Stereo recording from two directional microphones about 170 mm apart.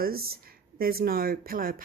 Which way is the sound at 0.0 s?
60° right (ahead or behind).